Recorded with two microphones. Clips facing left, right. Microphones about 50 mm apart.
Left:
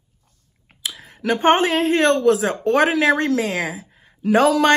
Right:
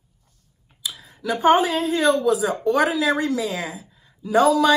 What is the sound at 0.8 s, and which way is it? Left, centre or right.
A woman's voice, left.